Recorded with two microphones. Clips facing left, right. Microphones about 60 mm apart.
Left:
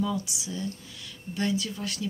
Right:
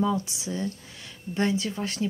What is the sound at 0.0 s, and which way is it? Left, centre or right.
Speech, right.